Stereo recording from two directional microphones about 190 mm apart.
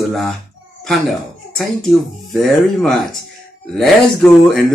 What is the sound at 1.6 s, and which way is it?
Speech, centre (ahead or behind).